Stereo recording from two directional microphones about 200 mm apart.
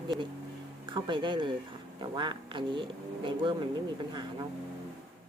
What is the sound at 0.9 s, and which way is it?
Speech, 25° right (ahead or behind).